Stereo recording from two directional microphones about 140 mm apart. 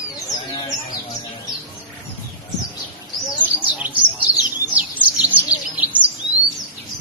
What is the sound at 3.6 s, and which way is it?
Chirp, 10° right (ahead or behind).